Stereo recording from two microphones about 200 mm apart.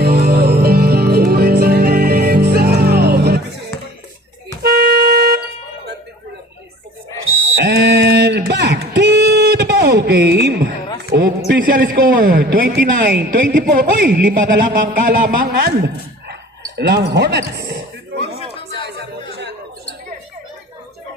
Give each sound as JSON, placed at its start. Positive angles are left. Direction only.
{"t": 0.0, "sound": "music", "side_deg": -50}
{"t": 4.6, "sound": "vehicle", "side_deg": -50}
{"t": 7.6, "sound": "a sound", "side_deg": -55}
{"t": 11.1, "sound": "a woman's voice", "side_deg": -50}
{"t": 16.7, "sound": "speech", "side_deg": -60}